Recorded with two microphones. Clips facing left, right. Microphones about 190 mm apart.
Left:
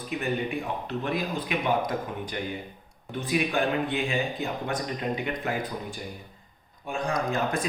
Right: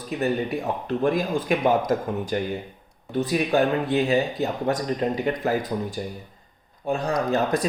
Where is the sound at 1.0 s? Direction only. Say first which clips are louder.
Right 9 dB; 45° right (ahead or behind).